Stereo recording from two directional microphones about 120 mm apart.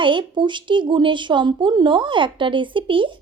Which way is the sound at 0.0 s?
40° right (ahead or behind).